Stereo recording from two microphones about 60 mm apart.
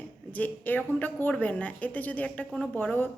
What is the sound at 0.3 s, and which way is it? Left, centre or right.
A woman's voice, left.